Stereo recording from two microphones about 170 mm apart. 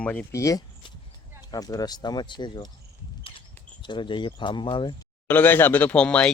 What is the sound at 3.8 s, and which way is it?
Speech, 30° left (ahead or behind).